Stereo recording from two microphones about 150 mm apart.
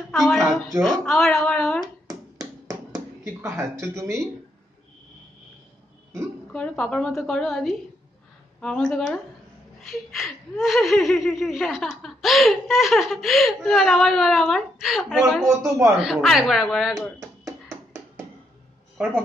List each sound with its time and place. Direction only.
0.1 s speech: centre (ahead or behind)
1.4 s a sound: 5° left (ahead or behind)
3.8 s speech: 20° right (ahead or behind)
6.5 s speech: 5° left (ahead or behind)
15.5 s speech: 20° right (ahead or behind)
16.0 s speech: centre (ahead or behind)
19.0 s speech: 10° right (ahead or behind)